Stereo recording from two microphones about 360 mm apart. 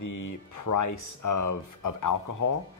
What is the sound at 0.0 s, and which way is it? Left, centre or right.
Speech, left.